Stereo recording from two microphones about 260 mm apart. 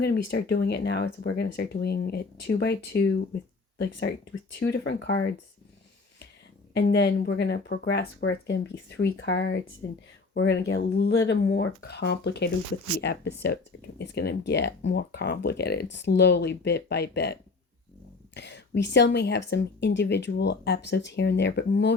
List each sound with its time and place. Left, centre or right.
0.3 s speech: left
4.6 s speech: left
6.7 s speech: left
18.3 s speech: left